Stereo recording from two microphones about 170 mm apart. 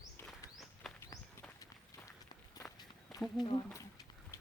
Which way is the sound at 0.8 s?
Centre (ahead or behind).